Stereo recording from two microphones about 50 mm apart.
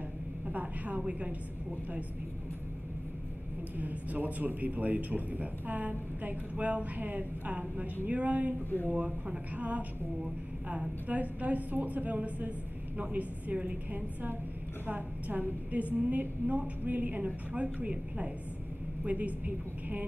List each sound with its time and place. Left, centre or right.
0.5 s a man's voice: right
3.7 s a man's voice: right
8.6 s speech: left
9.6 s a man's voice: right
14.9 s a man's voice: right